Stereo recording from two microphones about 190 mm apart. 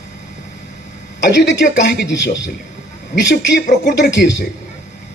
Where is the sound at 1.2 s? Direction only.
65° left (ahead or behind).